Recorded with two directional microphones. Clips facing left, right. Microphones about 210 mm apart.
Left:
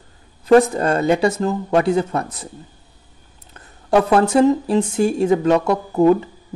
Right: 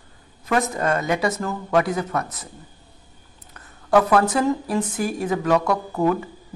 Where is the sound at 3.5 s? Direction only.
25° left (ahead or behind).